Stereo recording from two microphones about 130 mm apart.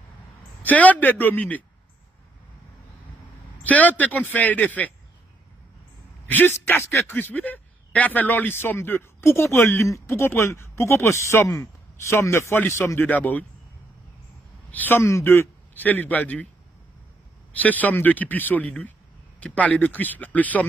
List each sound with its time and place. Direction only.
0.6 s a man's voice: 10° left (ahead or behind)
3.6 s a man's voice: 10° left (ahead or behind)
6.2 s speech: 15° left (ahead or behind)
14.7 s a man's voice: 15° left (ahead or behind)
17.6 s a man's voice: 10° left (ahead or behind)